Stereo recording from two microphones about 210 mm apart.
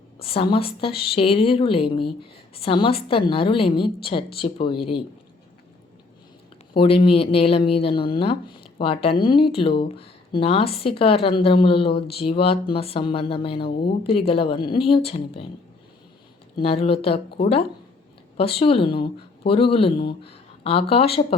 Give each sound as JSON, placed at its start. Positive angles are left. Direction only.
{"t": 0.2, "sound": "speech", "side_deg": 25}
{"t": 6.7, "sound": "speech", "side_deg": 25}
{"t": 16.6, "sound": "speech", "side_deg": 30}